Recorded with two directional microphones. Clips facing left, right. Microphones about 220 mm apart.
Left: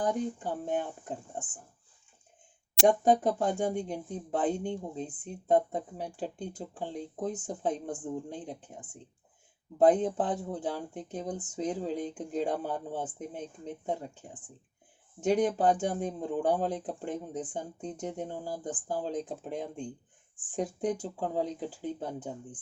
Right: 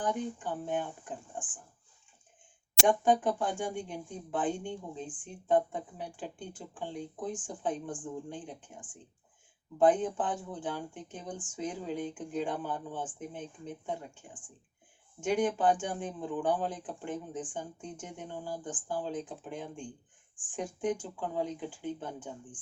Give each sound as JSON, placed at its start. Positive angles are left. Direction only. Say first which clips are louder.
{"t": 0.0, "sound": "speech", "louder": "left 3 dB", "side_deg": 40}
{"t": 2.8, "sound": "speech", "louder": "left 3 dB", "side_deg": 40}